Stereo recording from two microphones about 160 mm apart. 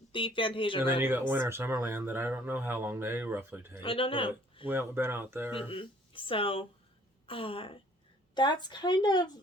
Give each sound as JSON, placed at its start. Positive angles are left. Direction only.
{"t": 0.1, "sound": "speech", "side_deg": 30}
{"t": 1.3, "sound": "speech", "side_deg": -15}
{"t": 3.8, "sound": "speech", "side_deg": 35}
{"t": 4.6, "sound": "speech", "side_deg": -15}
{"t": 5.5, "sound": "speech", "side_deg": 35}